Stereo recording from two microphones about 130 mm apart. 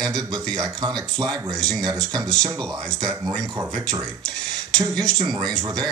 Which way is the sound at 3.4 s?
30° right (ahead or behind).